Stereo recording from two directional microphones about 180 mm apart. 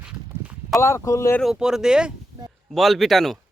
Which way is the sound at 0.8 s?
15° left (ahead or behind).